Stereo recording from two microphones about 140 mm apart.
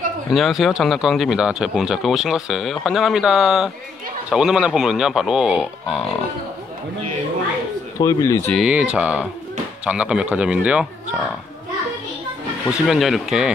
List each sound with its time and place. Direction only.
0.3 s speech: centre (ahead or behind)
8.0 s speech: 25° left (ahead or behind)
8.6 s speech: 5° right (ahead or behind)
12.7 s speech: centre (ahead or behind)